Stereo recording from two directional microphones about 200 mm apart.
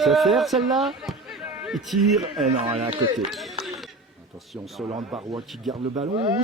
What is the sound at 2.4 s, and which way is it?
Speech, 35° right (ahead or behind).